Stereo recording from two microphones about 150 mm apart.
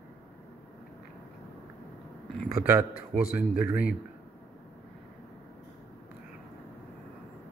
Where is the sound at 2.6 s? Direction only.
10° right (ahead or behind).